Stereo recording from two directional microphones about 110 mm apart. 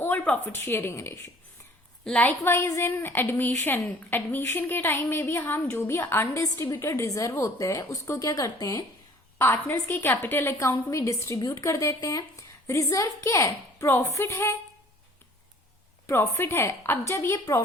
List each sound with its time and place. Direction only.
0.0 s a woman's voice: 20° left (ahead or behind)
2.0 s a woman's voice: 10° left (ahead or behind)
2.4 s a woman's voice: 25° left (ahead or behind)
16.0 s a woman's voice: 20° left (ahead or behind)